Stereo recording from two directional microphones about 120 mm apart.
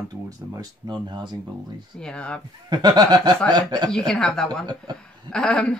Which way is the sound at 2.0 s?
10° left (ahead or behind).